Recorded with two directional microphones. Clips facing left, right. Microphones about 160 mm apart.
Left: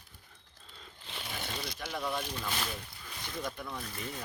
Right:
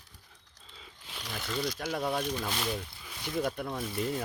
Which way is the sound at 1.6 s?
50° right (ahead or behind).